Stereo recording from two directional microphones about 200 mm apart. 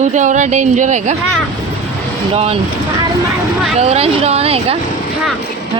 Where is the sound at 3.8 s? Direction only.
30° right (ahead or behind).